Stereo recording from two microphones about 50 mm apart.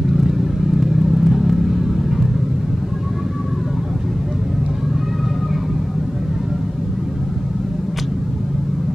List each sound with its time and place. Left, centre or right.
0.7 s vehicle: centre